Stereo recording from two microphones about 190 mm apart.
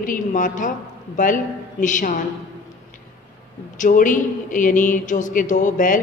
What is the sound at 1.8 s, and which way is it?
Speech, 40° left (ahead or behind).